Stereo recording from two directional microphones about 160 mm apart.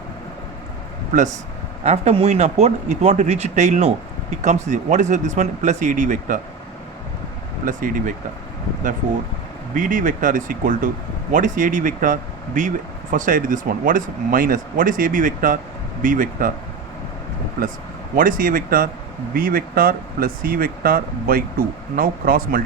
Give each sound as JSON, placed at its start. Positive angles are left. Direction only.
{"t": 1.1, "sound": "a man's voice", "side_deg": -50}
{"t": 7.6, "sound": "speech", "side_deg": -55}
{"t": 9.7, "sound": "speech", "side_deg": -55}
{"t": 18.2, "sound": "speech", "side_deg": -60}